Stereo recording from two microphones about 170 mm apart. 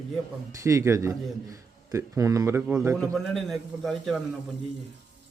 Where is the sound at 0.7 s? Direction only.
15° right (ahead or behind).